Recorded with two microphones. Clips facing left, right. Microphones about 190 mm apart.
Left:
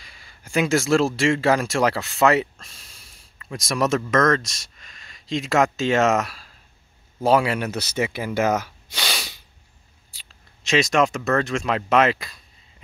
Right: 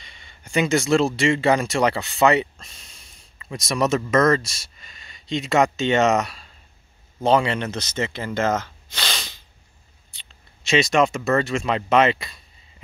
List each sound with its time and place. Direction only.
0.0 s speech: centre (ahead or behind)